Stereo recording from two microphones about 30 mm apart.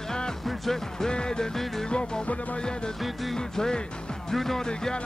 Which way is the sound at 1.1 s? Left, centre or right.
Left.